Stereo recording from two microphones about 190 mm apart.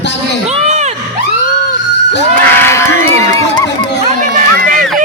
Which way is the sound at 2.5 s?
15° left (ahead or behind).